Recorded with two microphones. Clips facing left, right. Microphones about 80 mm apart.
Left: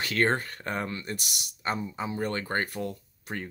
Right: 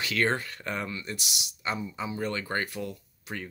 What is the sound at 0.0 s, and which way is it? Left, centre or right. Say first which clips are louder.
Speech: left 1 dB; left.